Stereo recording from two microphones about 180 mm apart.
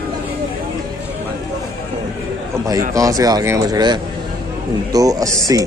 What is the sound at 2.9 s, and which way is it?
Speech, 20° right (ahead or behind).